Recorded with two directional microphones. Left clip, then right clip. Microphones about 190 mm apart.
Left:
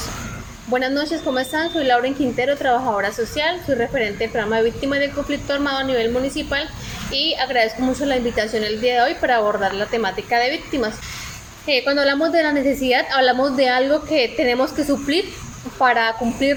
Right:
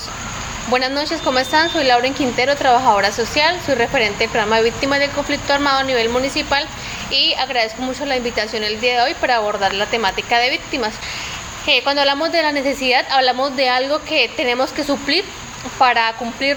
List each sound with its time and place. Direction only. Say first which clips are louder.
1.3 s a woman's voice: right 8 dB; 15° left (ahead or behind)
15.8 s a woman's voice: right 2 dB; 15° left (ahead or behind)